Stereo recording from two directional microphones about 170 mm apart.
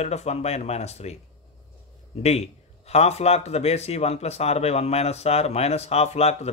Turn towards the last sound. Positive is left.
turn(degrees=40)  # may be behind; listen again after turning